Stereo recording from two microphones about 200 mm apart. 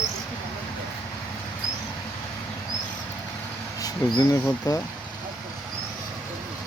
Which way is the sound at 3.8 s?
20° left (ahead or behind).